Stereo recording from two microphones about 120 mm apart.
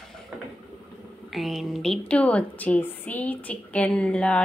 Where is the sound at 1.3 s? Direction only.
Centre (ahead or behind).